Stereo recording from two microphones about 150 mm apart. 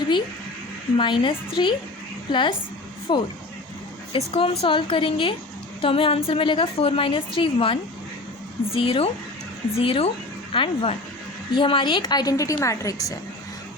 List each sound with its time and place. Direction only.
0.9 s a woman's voice: 35° left (ahead or behind)